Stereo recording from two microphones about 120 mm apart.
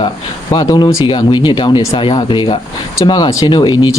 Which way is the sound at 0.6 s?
30° left (ahead or behind).